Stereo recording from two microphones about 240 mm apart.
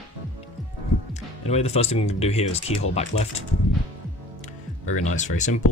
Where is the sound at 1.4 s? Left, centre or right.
Left.